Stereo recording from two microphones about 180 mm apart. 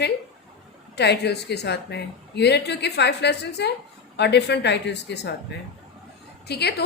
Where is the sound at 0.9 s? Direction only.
70° left (ahead or behind).